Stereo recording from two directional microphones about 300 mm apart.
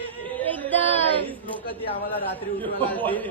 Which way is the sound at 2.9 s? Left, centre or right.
Centre.